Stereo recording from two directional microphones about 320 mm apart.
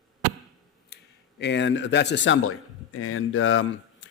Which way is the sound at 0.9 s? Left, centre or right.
Left.